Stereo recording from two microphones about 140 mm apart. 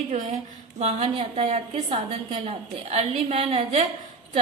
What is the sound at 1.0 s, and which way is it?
A woman's voice, 45° right (ahead or behind).